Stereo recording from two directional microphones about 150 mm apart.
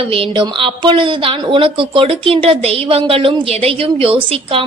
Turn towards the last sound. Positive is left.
turn(degrees=-40)  # may be behind; listen again after turning